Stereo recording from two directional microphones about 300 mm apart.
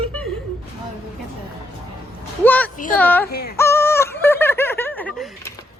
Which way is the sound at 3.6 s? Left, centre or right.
Centre.